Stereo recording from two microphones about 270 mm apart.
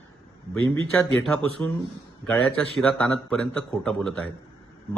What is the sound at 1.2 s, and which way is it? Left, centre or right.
A man's voice, centre.